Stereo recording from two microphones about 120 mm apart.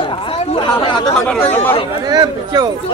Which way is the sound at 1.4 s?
15° left (ahead or behind).